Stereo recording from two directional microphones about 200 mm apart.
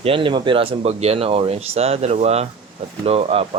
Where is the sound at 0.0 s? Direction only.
25° right (ahead or behind).